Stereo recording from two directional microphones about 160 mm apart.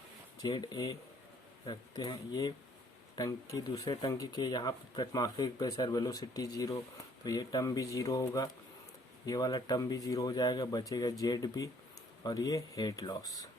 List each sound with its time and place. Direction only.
0.4 s speech: 25° left (ahead or behind)